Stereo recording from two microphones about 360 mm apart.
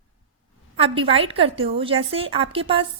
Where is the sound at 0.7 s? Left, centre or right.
Centre.